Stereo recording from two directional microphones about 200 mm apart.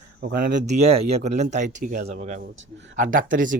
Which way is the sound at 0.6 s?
35° right (ahead or behind).